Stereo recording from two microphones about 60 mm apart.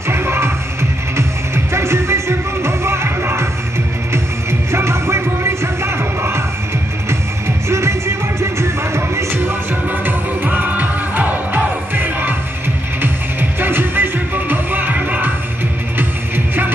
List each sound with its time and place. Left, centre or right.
0.1 s music: right
10.0 s music: right